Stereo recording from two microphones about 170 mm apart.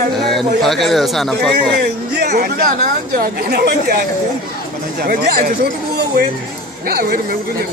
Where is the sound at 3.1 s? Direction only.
65° right (ahead or behind).